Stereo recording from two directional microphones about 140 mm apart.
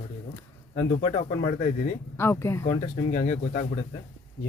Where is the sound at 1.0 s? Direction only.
50° left (ahead or behind).